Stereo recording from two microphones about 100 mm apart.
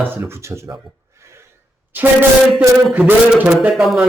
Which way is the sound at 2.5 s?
15° right (ahead or behind).